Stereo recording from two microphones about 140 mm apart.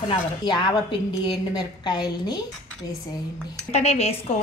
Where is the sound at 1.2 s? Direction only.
30° left (ahead or behind).